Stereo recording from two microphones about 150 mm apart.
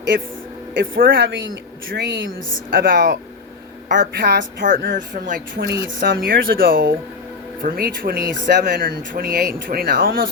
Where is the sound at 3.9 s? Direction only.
90° right.